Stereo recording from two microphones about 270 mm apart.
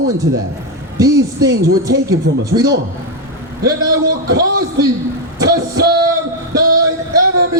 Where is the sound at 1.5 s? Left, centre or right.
Right.